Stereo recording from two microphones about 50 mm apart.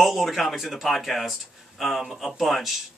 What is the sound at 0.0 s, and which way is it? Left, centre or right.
Speech, centre.